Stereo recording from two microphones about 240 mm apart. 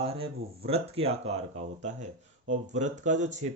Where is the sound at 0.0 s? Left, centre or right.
Right.